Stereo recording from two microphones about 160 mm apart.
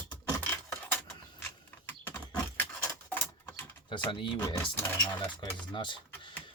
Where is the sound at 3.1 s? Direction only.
15° left (ahead or behind).